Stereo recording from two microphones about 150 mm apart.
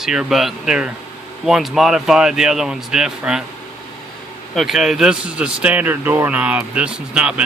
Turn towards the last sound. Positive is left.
turn(degrees=-5)  # may be behind; listen again after turning